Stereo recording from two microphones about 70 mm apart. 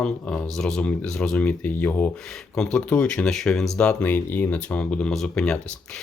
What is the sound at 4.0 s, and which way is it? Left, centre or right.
Speech, left.